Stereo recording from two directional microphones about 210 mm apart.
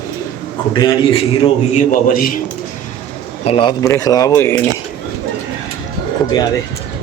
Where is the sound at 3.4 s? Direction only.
25° left (ahead or behind).